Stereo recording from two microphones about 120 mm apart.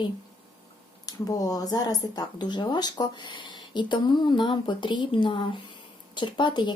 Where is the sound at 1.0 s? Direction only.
30° left (ahead or behind).